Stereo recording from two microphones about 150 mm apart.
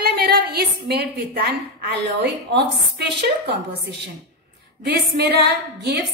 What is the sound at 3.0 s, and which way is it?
Speech, 90° right.